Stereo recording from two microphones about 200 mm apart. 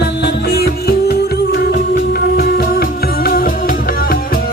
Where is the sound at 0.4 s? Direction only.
50° left (ahead or behind).